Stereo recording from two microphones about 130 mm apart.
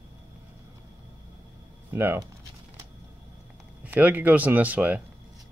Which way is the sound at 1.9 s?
20° right (ahead or behind).